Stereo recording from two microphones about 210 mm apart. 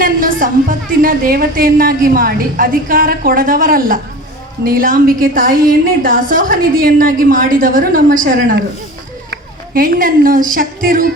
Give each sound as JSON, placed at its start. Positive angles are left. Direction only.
{"t": 0.0, "sound": "a woman's voice", "side_deg": -40}
{"t": 9.3, "sound": "a sound", "side_deg": -45}
{"t": 10.5, "sound": "a woman's voice", "side_deg": -40}